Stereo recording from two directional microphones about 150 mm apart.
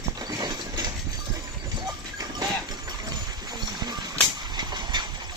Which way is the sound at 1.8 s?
25° right (ahead or behind).